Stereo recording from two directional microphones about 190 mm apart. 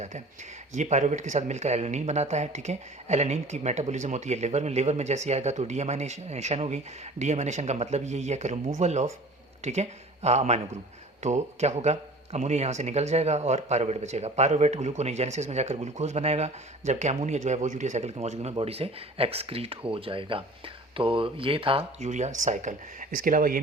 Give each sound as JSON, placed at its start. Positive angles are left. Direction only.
{"t": 0.7, "sound": "speech", "side_deg": -40}